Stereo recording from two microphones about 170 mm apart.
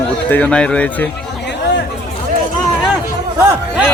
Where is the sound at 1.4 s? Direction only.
90° left.